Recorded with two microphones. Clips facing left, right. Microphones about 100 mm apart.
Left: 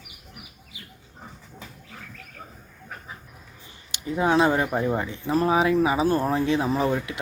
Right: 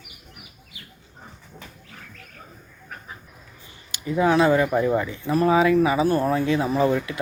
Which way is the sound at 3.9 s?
20° left (ahead or behind).